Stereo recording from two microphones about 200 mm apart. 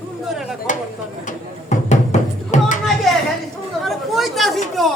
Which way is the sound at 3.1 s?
Centre (ahead or behind).